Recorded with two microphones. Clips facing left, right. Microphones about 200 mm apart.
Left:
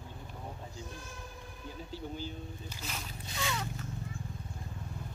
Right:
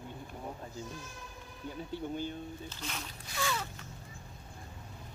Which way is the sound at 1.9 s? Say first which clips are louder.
Right 4 dB; 55° right (ahead or behind).